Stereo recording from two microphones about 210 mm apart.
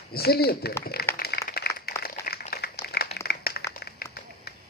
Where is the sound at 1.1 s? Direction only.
50° left (ahead or behind).